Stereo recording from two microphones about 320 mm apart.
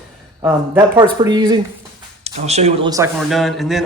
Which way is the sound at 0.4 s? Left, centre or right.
Centre.